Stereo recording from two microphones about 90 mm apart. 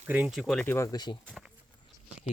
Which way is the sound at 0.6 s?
30° left (ahead or behind).